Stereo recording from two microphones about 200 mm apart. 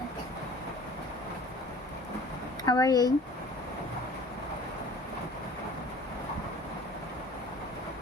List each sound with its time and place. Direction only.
2.6 s speech: 20° left (ahead or behind)